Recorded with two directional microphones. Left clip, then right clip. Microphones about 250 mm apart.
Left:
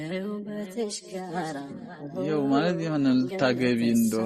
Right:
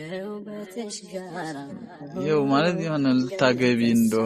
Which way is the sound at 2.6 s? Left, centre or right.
Centre.